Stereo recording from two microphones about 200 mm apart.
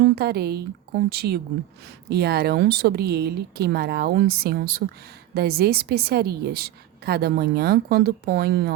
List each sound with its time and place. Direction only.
0.0 s a woman's voice: 50° right (ahead or behind)